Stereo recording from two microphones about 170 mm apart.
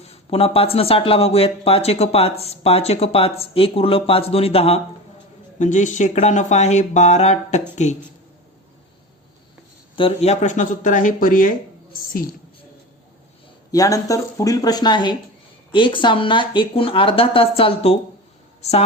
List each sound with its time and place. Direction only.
0.0 s speech: 35° left (ahead or behind)
9.9 s speech: 35° left (ahead or behind); by 11.5 s 55° left (ahead or behind)
13.7 s speech: 20° left (ahead or behind); by 18.9 s 40° left (ahead or behind)